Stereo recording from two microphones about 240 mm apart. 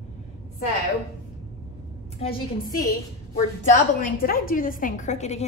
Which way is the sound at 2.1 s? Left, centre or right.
Left.